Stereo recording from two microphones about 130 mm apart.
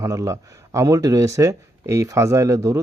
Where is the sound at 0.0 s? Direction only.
25° right (ahead or behind).